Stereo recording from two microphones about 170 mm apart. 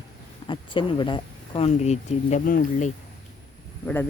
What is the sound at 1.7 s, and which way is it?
Speech, 40° left (ahead or behind).